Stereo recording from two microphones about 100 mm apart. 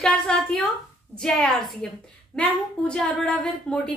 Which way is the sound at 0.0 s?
5° left (ahead or behind).